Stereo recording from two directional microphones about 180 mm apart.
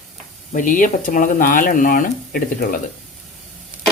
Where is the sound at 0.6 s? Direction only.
45° left (ahead or behind).